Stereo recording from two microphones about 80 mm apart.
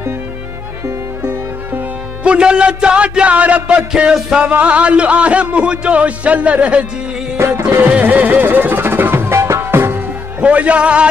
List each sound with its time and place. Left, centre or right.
0.8 s speech: right
7.3 s music: right
7.8 s music: right
10.4 s speech: centre